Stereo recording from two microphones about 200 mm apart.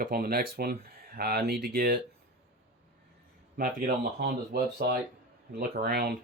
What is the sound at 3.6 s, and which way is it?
Speech, 50° right (ahead or behind).